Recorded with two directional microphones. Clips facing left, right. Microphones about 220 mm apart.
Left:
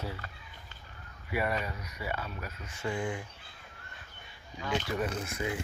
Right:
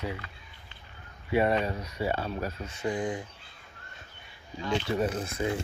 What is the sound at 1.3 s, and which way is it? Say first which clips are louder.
Speech: right 7 dB; 25° right (ahead or behind).